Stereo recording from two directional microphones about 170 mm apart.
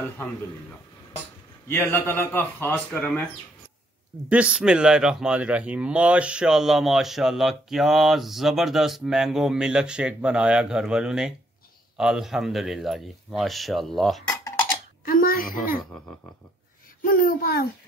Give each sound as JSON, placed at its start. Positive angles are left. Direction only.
{"t": 1.7, "sound": "speech", "side_deg": 15}
{"t": 4.3, "sound": "speech", "side_deg": -5}
{"t": 15.0, "sound": "a child's voice", "side_deg": 60}
{"t": 17.0, "sound": "a child's voice", "side_deg": 55}